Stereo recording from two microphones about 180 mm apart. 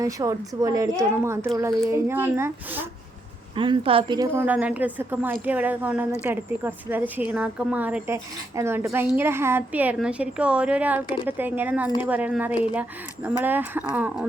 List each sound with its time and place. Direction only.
0.0 s speech: 20° right (ahead or behind)
3.5 s a woman's voice: 30° right (ahead or behind)
4.4 s speech: 10° right (ahead or behind)